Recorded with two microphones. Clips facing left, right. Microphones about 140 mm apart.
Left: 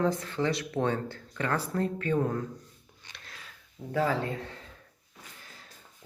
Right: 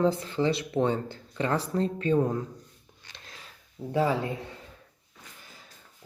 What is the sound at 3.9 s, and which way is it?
Speech, 20° right (ahead or behind).